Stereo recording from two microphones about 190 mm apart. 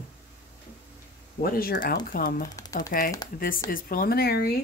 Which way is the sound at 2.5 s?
15° left (ahead or behind).